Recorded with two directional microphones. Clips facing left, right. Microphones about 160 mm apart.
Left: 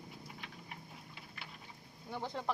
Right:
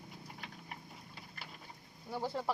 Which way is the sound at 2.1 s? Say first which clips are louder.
Right 2 dB; 5° right (ahead or behind).